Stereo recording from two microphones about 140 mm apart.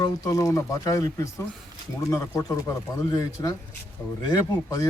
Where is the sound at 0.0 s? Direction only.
25° left (ahead or behind).